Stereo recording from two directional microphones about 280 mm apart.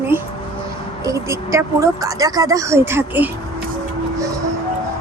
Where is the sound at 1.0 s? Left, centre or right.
Centre.